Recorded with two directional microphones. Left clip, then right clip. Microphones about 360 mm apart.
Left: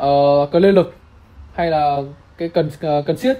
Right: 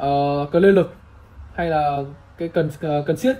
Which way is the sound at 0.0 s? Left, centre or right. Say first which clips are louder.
Left 7 dB; left.